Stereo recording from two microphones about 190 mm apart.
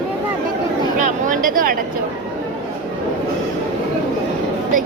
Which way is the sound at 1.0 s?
40° right (ahead or behind).